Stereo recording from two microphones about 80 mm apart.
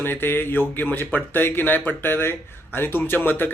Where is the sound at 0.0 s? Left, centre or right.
Left.